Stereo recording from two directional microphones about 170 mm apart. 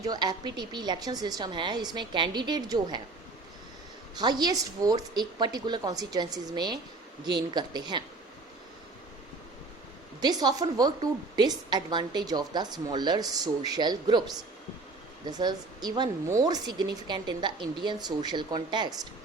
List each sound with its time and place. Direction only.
0.0 s a woman's voice: 25° right (ahead or behind)
4.2 s a woman's voice: 25° right (ahead or behind)
10.2 s a woman's voice: 25° right (ahead or behind)